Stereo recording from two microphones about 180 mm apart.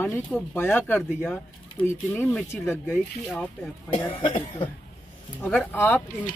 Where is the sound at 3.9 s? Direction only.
30° left (ahead or behind).